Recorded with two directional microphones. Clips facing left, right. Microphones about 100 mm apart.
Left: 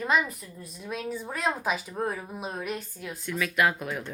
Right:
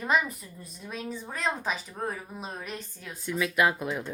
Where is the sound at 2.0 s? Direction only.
10° left (ahead or behind).